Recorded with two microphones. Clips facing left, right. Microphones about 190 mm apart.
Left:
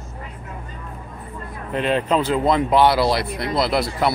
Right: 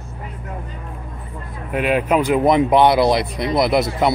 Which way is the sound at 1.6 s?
10° right (ahead or behind).